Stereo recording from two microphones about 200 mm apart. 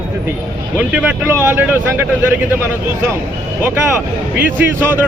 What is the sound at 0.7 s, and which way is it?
Speech, 5° right (ahead or behind).